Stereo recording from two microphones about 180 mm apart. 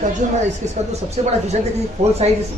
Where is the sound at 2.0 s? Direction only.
35° right (ahead or behind).